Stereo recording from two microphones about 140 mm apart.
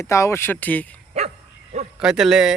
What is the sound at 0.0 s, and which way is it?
Speech, 20° left (ahead or behind).